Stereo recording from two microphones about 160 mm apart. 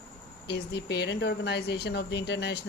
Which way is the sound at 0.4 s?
90° left.